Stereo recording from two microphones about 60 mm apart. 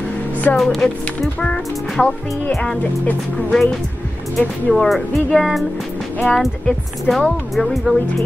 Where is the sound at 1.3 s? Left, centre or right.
Centre.